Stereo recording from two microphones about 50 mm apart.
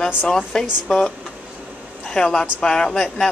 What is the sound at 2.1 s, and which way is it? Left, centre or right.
Speech, centre.